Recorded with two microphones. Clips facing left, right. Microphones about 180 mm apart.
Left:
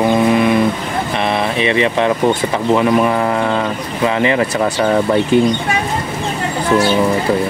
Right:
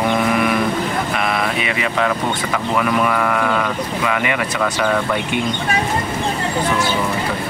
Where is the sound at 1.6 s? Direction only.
25° left (ahead or behind).